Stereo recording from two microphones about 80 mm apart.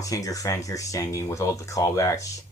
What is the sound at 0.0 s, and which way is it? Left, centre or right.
Speech, left.